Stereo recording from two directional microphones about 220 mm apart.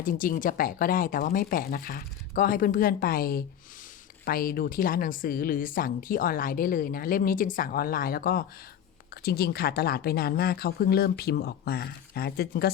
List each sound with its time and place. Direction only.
0.0 s speech: 40° left (ahead or behind)